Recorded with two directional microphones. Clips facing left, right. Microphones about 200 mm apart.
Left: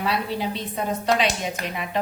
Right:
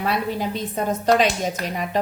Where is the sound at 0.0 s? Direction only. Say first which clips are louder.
Right 2 dB; 45° right (ahead or behind).